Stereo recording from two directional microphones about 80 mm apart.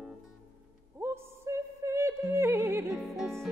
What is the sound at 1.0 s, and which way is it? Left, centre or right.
Music, right.